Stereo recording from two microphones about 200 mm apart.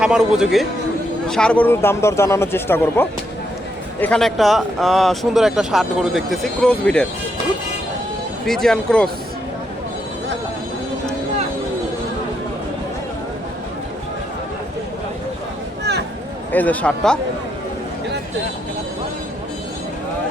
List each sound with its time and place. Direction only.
0.0 s speech: 5° right (ahead or behind)
8.4 s speech: centre (ahead or behind)
15.8 s a sound: 55° right (ahead or behind)
16.5 s speech: 10° left (ahead or behind)